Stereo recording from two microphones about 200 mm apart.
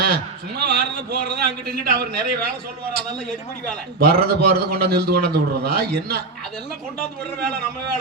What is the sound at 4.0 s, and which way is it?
A man's voice, 50° right (ahead or behind).